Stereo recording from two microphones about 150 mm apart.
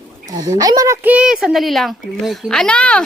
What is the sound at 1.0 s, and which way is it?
A child's voice, 5° right (ahead or behind).